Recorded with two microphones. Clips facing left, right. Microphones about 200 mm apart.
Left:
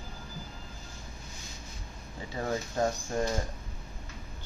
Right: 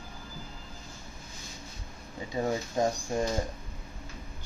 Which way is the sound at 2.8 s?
15° right (ahead or behind).